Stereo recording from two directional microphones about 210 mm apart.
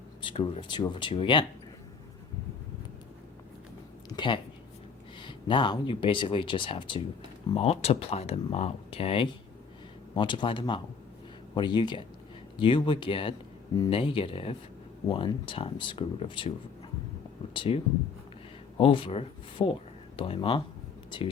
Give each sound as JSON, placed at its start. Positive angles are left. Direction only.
{"t": 0.2, "sound": "speech", "side_deg": 25}
{"t": 4.1, "sound": "a sound", "side_deg": 20}
{"t": 5.2, "sound": "speech", "side_deg": 20}
{"t": 17.5, "sound": "speech", "side_deg": 25}
{"t": 18.8, "sound": "speech", "side_deg": 25}